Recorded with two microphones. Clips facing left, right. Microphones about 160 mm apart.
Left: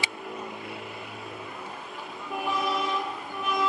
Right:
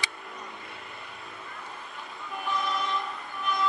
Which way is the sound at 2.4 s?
5° left (ahead or behind).